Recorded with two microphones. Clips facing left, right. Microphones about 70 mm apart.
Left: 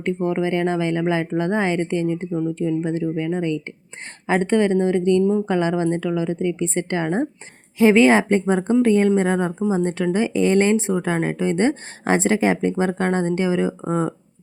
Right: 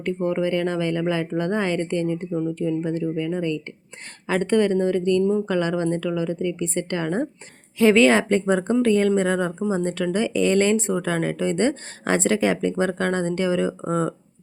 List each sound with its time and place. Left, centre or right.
0.2 s speech: centre